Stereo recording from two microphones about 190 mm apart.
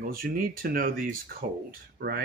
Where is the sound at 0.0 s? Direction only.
50° right (ahead or behind).